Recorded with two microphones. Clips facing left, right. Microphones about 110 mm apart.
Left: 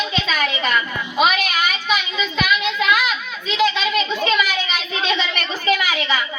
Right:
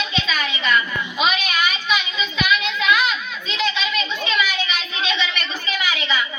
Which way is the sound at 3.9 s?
45° left (ahead or behind).